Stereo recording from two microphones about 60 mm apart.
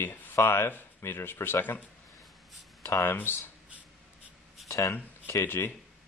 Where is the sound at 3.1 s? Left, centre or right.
Left.